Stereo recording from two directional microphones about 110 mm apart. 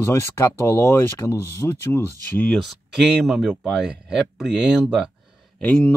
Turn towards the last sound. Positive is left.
turn(degrees=10)  # may be behind; listen again after turning